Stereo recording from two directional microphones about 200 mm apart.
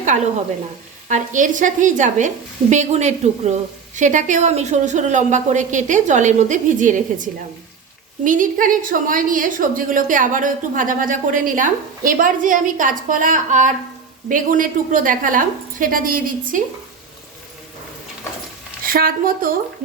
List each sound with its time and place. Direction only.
1.0 s a woman's voice: 40° right (ahead or behind)
18.8 s a woman's voice: 45° right (ahead or behind)